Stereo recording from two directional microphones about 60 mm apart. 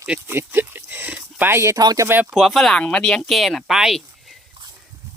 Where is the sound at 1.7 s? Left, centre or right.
Right.